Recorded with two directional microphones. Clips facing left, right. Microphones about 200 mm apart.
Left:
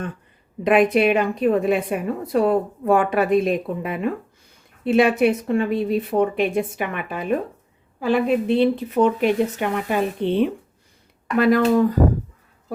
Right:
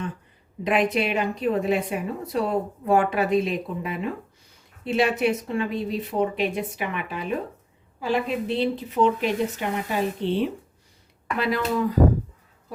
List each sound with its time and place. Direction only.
0.6 s a woman's voice: 55° left (ahead or behind)